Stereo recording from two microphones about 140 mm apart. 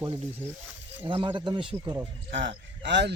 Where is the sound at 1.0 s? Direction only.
35° right (ahead or behind).